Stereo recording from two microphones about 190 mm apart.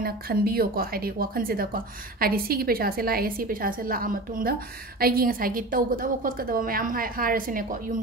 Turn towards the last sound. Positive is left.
turn(degrees=-45)  # may be behind; listen again after turning